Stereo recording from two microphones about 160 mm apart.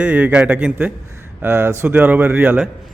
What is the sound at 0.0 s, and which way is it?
A man's voice, 10° right (ahead or behind).